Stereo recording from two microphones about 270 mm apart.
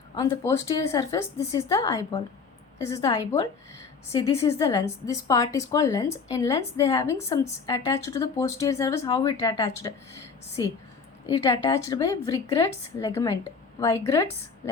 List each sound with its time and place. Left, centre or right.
0.2 s a woman's voice: centre